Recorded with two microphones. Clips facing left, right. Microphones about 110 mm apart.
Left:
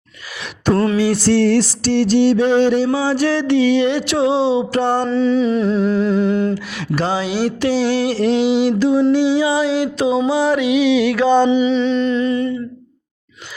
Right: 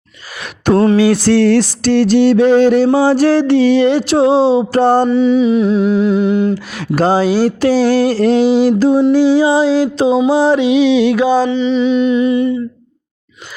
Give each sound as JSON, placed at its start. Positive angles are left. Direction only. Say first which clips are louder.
{"t": 0.7, "sound": "music", "louder": "right 5 dB", "side_deg": -25}
{"t": 0.9, "sound": "music", "louder": "right 4 dB", "side_deg": -80}
{"t": 5.0, "sound": "humming", "louder": "right 4 dB", "side_deg": -15}
{"t": 6.7, "sound": "music", "louder": "right 11 dB", "side_deg": -45}
{"t": 9.1, "sound": "a sound", "louder": "right 5 dB", "side_deg": -40}
{"t": 10.2, "sound": "music", "louder": "right 5 dB", "side_deg": -30}
{"t": 11.6, "sound": "humming", "louder": "right 3 dB", "side_deg": -5}